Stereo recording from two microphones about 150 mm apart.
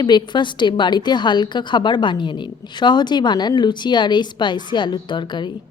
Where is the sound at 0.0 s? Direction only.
30° left (ahead or behind).